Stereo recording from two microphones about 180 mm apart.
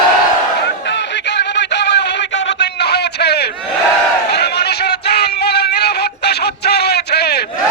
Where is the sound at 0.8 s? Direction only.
75° left (ahead or behind).